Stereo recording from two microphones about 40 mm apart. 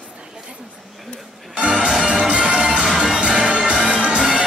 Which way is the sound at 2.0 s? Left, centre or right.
Right.